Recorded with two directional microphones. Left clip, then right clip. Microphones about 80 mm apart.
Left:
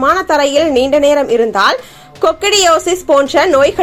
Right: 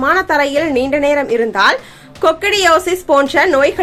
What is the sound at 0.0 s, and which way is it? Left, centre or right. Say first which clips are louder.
Speech: left 2 dB; left.